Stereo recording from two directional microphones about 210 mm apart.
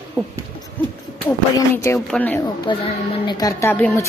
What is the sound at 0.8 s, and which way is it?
Hoot, 10° left (ahead or behind).